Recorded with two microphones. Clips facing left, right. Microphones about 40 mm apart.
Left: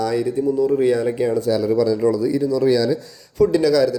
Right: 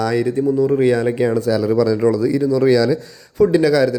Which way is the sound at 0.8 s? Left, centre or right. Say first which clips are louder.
Right 2 dB; right.